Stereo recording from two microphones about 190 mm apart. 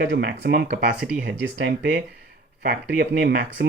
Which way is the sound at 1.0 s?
5° right (ahead or behind).